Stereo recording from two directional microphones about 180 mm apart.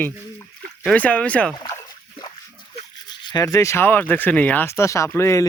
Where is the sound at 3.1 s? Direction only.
20° left (ahead or behind).